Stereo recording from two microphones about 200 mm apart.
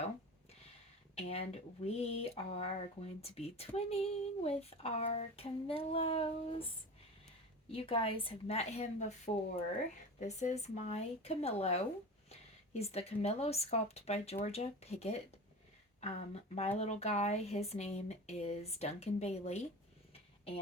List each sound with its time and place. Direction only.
1.1 s speech: 30° left (ahead or behind)
7.7 s a woman's voice: 25° left (ahead or behind)
20.1 s a sound: 30° left (ahead or behind)